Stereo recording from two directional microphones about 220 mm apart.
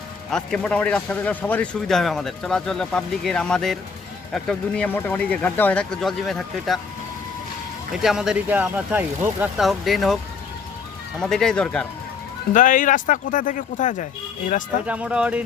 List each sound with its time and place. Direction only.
0.3 s a man's voice: 5° left (ahead or behind)
8.0 s a man's voice: 5° right (ahead or behind)
11.2 s a man's voice: 5° left (ahead or behind)
12.5 s speech: 35° left (ahead or behind)
14.8 s a man's voice: 5° right (ahead or behind)